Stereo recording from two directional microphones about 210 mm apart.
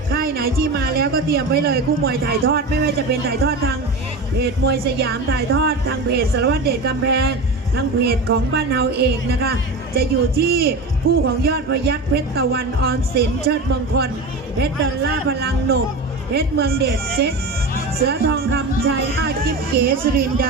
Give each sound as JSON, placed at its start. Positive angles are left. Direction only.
{"t": 0.1, "sound": "a woman's voice", "side_deg": -45}